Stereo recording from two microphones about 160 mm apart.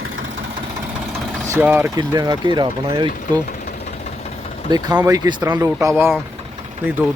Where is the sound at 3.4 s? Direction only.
55° left (ahead or behind).